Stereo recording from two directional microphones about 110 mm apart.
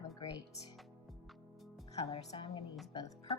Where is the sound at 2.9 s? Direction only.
35° left (ahead or behind).